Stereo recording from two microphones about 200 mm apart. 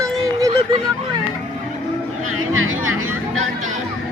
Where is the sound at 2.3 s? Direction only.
90° right.